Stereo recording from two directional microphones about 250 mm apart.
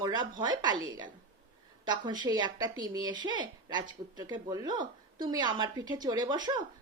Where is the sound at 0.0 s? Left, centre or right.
Centre.